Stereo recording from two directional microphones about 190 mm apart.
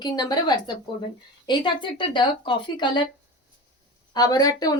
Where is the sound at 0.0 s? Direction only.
20° left (ahead or behind).